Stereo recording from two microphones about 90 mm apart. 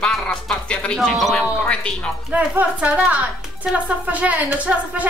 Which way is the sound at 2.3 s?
15° right (ahead or behind).